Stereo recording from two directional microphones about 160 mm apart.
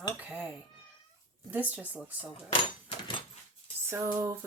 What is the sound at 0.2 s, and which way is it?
Cat, 10° right (ahead or behind).